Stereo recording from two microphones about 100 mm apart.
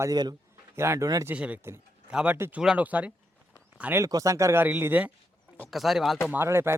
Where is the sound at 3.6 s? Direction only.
20° right (ahead or behind).